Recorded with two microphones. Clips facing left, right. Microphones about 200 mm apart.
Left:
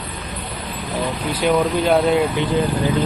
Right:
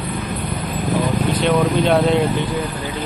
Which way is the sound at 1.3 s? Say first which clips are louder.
Left 1 dB; 10° left (ahead or behind).